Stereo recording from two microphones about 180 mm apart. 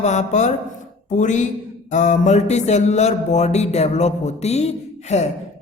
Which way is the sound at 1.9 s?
40° left (ahead or behind).